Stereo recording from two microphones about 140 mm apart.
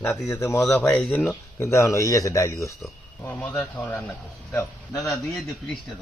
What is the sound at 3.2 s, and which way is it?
Speech, 10° left (ahead or behind).